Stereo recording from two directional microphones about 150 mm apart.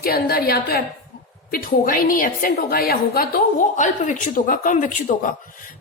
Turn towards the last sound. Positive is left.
turn(degrees=60)  # may be behind; listen again after turning